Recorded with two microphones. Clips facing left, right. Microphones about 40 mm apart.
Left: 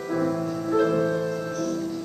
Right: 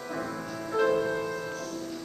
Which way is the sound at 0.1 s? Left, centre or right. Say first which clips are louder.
Left 10 dB; centre.